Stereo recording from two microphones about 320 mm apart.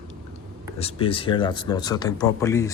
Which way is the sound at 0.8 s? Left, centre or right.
Centre.